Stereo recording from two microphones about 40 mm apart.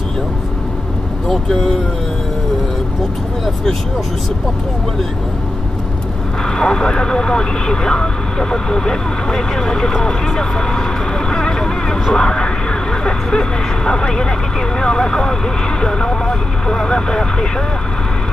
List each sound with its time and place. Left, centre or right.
6.6 s speech: centre
11.2 s vehicle: centre
13.0 s speech: centre